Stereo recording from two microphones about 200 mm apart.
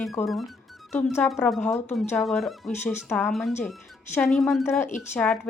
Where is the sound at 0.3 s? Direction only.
Centre (ahead or behind).